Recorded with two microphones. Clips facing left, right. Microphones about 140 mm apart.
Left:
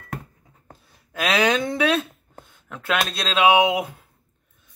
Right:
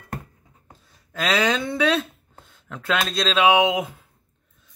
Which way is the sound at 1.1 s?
15° left (ahead or behind).